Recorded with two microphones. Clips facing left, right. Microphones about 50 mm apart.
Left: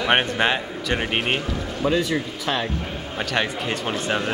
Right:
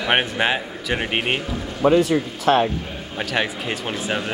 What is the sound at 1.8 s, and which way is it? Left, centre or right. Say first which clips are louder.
Speech: right 6 dB; right.